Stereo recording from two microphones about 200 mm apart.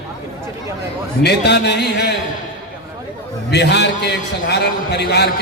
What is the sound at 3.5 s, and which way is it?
A man's voice, 60° left (ahead or behind).